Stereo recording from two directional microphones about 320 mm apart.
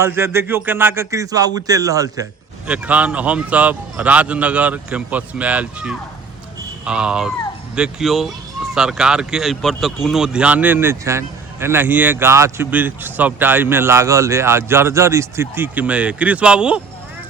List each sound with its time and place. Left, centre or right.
0.0 s speech: centre